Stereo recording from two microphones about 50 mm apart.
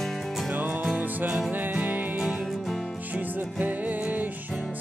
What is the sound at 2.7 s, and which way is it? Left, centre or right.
Music, centre.